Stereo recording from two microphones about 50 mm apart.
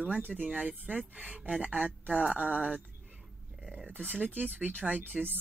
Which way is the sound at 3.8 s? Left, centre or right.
Left.